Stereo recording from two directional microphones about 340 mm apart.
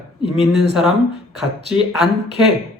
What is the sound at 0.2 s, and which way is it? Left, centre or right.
A man's voice, centre.